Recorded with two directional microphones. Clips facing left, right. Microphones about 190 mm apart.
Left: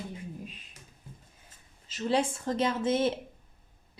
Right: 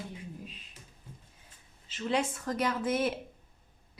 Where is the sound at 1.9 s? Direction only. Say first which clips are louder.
Left 3 dB; 35° left (ahead or behind).